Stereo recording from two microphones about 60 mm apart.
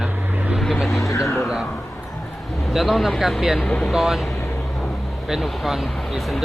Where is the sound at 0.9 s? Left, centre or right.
Left.